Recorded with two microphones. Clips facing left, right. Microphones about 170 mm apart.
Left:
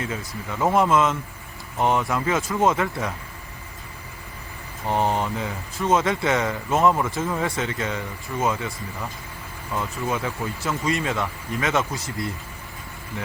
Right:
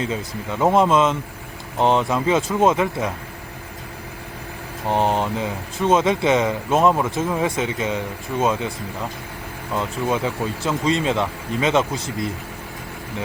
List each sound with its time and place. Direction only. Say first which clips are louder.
0.6 s speech: right 3 dB; 20° right (ahead or behind)
4.9 s speech: right 3 dB; 20° right (ahead or behind)
9.7 s speech: right 4 dB; 20° right (ahead or behind)